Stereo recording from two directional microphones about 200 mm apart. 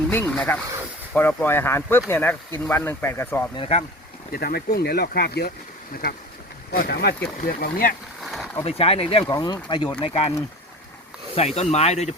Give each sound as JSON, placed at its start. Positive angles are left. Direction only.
{"t": 0.1, "sound": "speech", "side_deg": 10}
{"t": 3.5, "sound": "speech", "side_deg": 30}
{"t": 4.3, "sound": "speech", "side_deg": 50}
{"t": 8.2, "sound": "a sound", "side_deg": 0}
{"t": 8.6, "sound": "speech", "side_deg": 30}
{"t": 11.3, "sound": "speech", "side_deg": 30}